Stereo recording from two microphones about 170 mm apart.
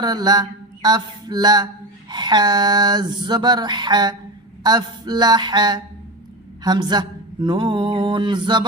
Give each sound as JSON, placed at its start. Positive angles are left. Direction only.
{"t": 0.0, "sound": "mantra", "side_deg": -25}